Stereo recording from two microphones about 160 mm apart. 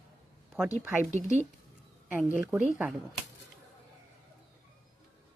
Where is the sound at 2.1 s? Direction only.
10° right (ahead or behind).